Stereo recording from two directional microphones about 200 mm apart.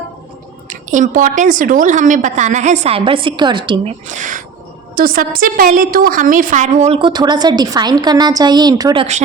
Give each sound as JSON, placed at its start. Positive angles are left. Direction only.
{"t": 0.7, "sound": "a woman's voice", "side_deg": -40}
{"t": 4.0, "sound": "a woman's voice", "side_deg": -35}